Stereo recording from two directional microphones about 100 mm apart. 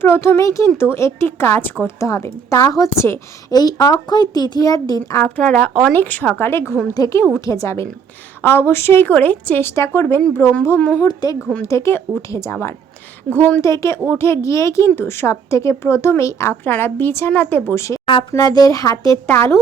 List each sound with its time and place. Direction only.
0.0 s speech: 25° left (ahead or behind)
2.0 s a woman's voice: 30° left (ahead or behind)
3.5 s a child's voice: 40° left (ahead or behind)
5.2 s a woman's voice: 10° left (ahead or behind); by 10.2 s 25° left (ahead or behind)
10.8 s speech: 15° left (ahead or behind)
11.0 s a woman's voice: 40° left (ahead or behind)
18.0 s a woman's voice: 60° left (ahead or behind)
18.3 s a woman's voice: 40° left (ahead or behind)
19.3 s speech: 25° left (ahead or behind)